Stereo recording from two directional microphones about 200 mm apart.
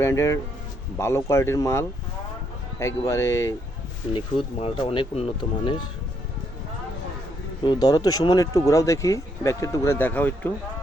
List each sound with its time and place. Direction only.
0.0 s speech: 15° left (ahead or behind)
4.6 s speech: 25° left (ahead or behind)
7.6 s speech: 20° left (ahead or behind)